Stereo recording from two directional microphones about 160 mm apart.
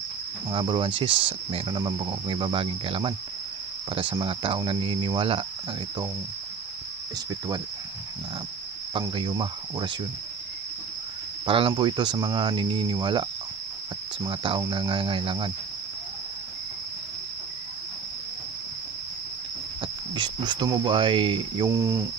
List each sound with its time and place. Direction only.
0.5 s speech: 30° right (ahead or behind)
7.2 s cricket: 25° right (ahead or behind)
8.9 s cricket: 30° right (ahead or behind)
11.4 s cricket: 35° right (ahead or behind)
14.2 s speech: 35° right (ahead or behind)
20.2 s cricket: 25° right (ahead or behind)
21.6 s cricket: 20° right (ahead or behind)